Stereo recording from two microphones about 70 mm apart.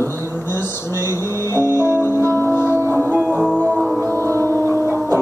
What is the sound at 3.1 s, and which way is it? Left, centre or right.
Music, centre.